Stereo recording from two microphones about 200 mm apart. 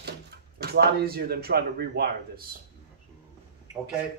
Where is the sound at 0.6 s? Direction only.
50° right (ahead or behind).